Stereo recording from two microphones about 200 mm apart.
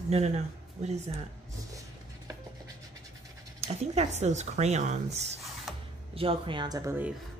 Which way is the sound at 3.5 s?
30° right (ahead or behind).